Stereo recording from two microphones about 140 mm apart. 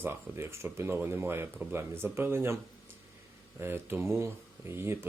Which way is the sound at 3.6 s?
15° right (ahead or behind).